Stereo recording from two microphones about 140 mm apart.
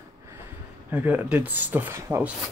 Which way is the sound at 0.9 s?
10° right (ahead or behind).